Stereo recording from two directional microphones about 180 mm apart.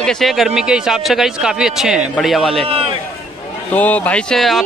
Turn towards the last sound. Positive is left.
turn(degrees=0)  # may be behind; listen again after turning